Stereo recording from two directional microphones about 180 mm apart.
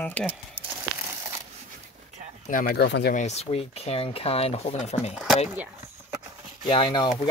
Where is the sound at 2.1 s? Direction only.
40° right (ahead or behind).